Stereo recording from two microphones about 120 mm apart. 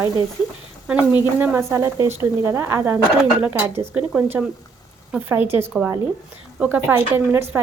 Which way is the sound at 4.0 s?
10° right (ahead or behind).